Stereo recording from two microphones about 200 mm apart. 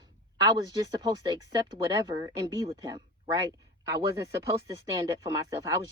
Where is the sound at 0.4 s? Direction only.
20° right (ahead or behind).